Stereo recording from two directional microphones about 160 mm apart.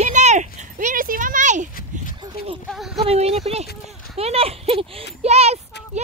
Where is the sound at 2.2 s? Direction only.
35° right (ahead or behind).